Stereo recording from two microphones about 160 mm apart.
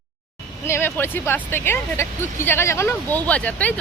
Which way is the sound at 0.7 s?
15° left (ahead or behind).